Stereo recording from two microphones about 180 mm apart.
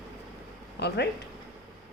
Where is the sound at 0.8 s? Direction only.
65° left (ahead or behind).